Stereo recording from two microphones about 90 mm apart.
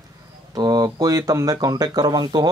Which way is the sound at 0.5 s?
50° right (ahead or behind).